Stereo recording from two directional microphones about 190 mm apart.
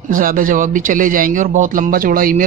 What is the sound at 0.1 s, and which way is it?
Speech, 45° right (ahead or behind).